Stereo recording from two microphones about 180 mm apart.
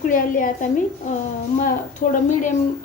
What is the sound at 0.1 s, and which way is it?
Speech, 50° left (ahead or behind).